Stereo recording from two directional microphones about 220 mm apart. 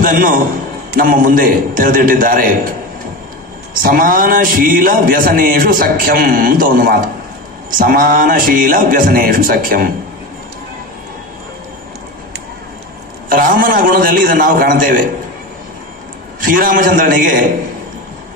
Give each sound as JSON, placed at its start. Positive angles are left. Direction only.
{"t": 0.0, "sound": "a man's voice", "side_deg": -40}
{"t": 3.7, "sound": "a man's voice", "side_deg": -40}
{"t": 13.3, "sound": "a man's voice", "side_deg": -40}
{"t": 16.3, "sound": "a man's voice", "side_deg": -40}